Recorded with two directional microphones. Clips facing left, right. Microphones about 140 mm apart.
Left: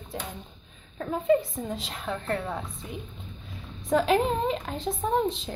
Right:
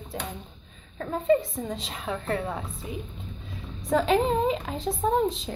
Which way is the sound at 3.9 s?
Centre (ahead or behind).